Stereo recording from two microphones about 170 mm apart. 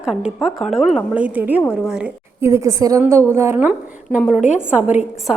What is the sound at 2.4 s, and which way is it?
A woman's voice, 15° right (ahead or behind).